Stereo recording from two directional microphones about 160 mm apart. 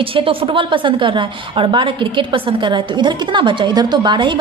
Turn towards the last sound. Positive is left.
turn(degrees=-30)  # may be behind; listen again after turning